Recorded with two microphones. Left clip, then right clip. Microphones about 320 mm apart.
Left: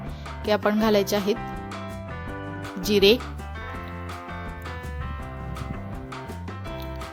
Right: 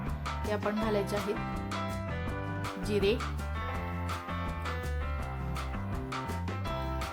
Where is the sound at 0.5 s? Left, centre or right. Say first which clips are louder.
Left 11 dB; left.